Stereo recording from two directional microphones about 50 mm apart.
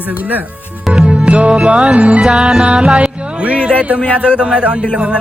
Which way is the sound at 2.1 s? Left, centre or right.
Centre.